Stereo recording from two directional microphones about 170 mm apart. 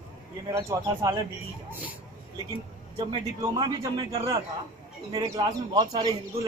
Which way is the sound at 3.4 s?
20° right (ahead or behind).